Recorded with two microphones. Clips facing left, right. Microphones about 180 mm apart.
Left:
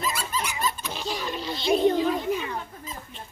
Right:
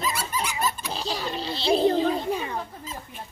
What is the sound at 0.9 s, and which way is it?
A child's voice, 35° right (ahead or behind).